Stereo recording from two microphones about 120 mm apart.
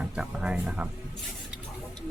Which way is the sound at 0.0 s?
10° right (ahead or behind).